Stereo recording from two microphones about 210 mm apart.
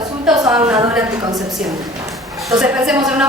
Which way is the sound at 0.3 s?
Centre (ahead or behind).